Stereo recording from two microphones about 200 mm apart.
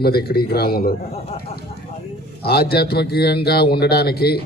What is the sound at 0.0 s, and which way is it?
Speech, 50° left (ahead or behind).